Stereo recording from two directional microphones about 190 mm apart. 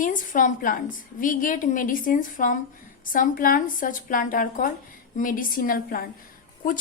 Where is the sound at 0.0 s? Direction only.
45° left (ahead or behind).